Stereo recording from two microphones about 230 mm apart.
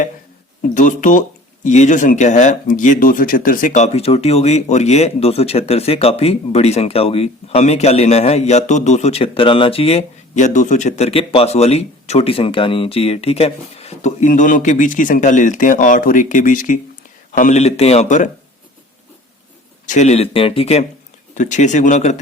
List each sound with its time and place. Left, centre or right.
0.7 s speech: left
19.9 s speech: left